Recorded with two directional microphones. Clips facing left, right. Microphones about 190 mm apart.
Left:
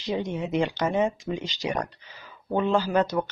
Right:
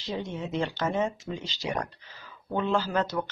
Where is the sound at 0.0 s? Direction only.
15° left (ahead or behind).